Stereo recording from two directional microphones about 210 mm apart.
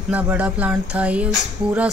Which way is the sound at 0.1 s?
5° right (ahead or behind).